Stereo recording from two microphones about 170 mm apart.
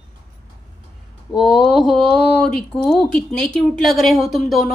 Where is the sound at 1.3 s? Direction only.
Centre (ahead or behind).